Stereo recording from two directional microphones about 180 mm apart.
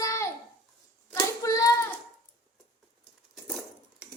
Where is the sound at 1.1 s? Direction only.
20° left (ahead or behind).